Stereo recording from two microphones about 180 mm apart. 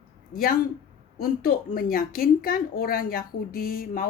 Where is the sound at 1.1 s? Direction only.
55° left (ahead or behind).